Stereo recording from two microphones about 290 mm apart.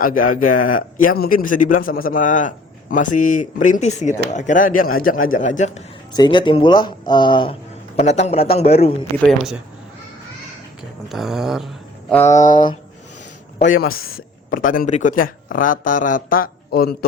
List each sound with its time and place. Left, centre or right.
0.0 s speech: left
9.2 s speech: centre
11.1 s speech: centre
13.6 s speech: left